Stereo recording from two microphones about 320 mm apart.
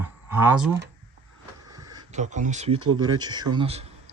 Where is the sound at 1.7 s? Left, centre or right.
Centre.